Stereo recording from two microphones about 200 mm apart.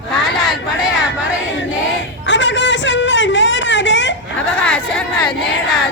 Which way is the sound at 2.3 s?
65° left (ahead or behind).